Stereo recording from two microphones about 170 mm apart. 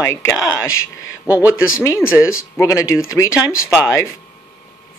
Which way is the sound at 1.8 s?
15° left (ahead or behind).